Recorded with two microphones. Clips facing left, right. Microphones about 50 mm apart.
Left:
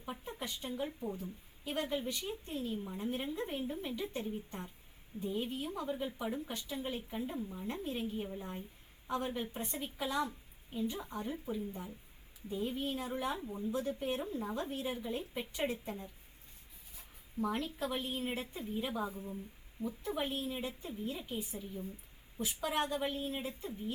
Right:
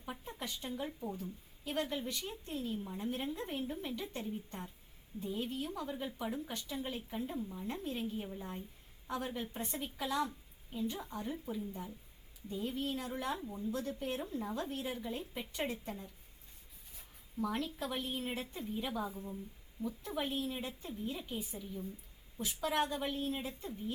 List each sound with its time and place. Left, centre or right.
0.3 s a woman's voice: centre
10.9 s a woman's voice: centre
17.5 s a woman's voice: centre